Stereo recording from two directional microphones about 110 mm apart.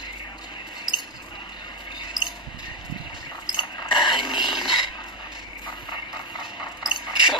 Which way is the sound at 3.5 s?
45° left (ahead or behind).